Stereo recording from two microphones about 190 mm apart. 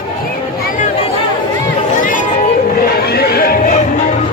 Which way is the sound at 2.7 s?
55° left (ahead or behind).